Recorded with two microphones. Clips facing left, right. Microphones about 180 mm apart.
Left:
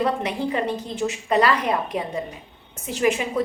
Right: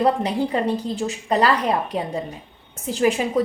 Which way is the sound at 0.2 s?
35° right (ahead or behind).